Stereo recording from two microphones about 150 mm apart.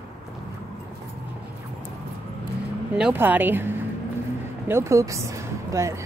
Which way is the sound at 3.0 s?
10° right (ahead or behind).